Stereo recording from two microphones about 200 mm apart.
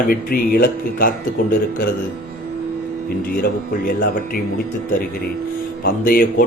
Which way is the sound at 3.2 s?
50° left (ahead or behind).